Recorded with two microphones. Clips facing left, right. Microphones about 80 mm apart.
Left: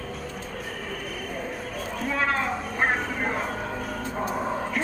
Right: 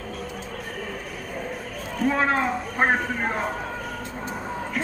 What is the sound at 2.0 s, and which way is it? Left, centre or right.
Speech, right.